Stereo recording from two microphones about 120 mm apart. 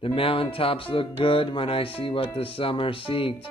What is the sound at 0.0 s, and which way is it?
Speech, 50° left (ahead or behind).